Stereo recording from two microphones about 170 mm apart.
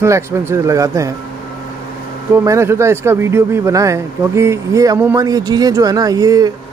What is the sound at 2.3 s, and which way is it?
Speech, 15° right (ahead or behind).